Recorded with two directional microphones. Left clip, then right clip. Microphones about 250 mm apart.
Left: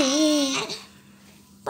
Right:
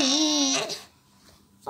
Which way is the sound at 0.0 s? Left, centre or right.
Right.